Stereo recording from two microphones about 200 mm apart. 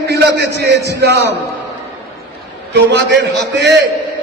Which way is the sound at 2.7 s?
60° right (ahead or behind).